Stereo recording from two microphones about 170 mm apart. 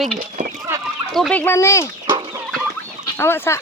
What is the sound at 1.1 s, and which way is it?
Speech, 5° left (ahead or behind).